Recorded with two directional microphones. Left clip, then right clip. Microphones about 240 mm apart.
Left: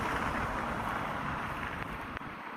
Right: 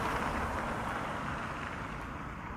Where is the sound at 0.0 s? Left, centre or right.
Right.